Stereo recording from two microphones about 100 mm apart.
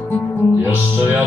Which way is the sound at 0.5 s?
20° right (ahead or behind).